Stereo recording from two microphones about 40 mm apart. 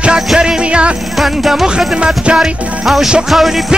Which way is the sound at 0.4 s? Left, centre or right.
Right.